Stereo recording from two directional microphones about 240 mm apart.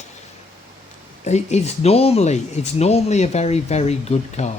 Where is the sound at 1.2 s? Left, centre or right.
Left.